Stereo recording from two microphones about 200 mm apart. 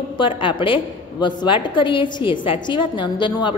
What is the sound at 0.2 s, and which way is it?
A woman's voice, 25° left (ahead or behind).